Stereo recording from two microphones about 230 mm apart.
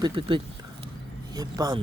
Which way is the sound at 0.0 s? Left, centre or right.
Right.